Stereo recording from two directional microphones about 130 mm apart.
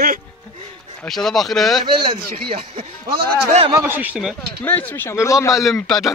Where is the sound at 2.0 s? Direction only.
45° right (ahead or behind).